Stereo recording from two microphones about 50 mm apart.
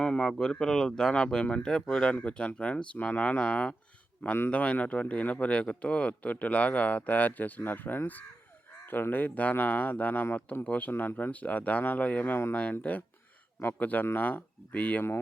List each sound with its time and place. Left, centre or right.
0.0 s speech: centre
4.2 s speech: left
4.5 s speech: left